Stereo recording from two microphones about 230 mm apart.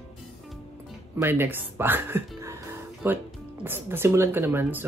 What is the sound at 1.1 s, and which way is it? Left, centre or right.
Music, centre.